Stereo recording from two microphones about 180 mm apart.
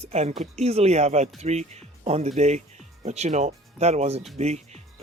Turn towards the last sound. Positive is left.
turn(degrees=-40)  # may be behind; listen again after turning